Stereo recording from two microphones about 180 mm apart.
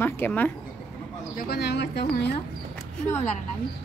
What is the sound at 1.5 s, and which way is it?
Speech, 65° left (ahead or behind).